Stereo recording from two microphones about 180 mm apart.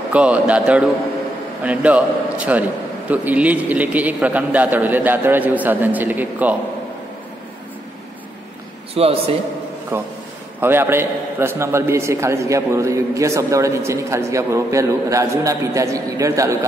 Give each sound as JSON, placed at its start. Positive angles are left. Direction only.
{"t": 0.1, "sound": "a man's voice", "side_deg": -5}
{"t": 8.9, "sound": "a man's voice", "side_deg": -35}
{"t": 9.9, "sound": "a man's voice", "side_deg": -10}